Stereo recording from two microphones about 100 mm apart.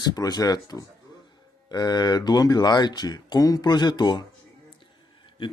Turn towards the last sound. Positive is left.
turn(degrees=50)  # may be behind; listen again after turning